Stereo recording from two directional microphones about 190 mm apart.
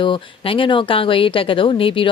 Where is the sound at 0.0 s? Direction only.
25° left (ahead or behind).